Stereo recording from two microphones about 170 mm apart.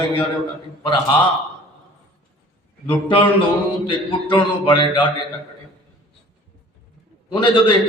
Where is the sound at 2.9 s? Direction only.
30° left (ahead or behind).